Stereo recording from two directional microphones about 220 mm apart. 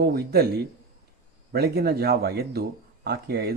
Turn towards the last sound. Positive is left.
turn(degrees=-45)  # may be behind; listen again after turning